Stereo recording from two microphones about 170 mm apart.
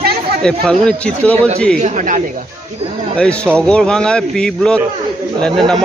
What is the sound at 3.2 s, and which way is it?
Speech, 5° left (ahead or behind).